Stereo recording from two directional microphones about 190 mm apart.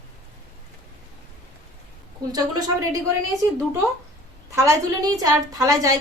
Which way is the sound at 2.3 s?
20° right (ahead or behind).